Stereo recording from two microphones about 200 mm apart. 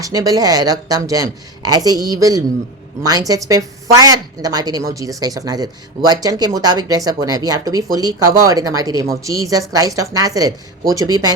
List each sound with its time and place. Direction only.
0.0 s a woman's voice: 15° right (ahead or behind)